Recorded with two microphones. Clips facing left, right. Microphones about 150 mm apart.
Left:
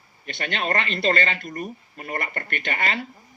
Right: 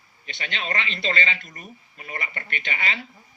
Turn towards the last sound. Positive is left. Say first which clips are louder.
# left 4 dB
turn(degrees=50)  # may be behind; listen again after turning